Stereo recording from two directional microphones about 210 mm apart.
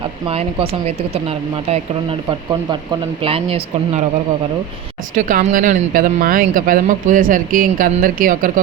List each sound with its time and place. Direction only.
0.3 s speech: 25° right (ahead or behind)
5.1 s speech: 35° right (ahead or behind)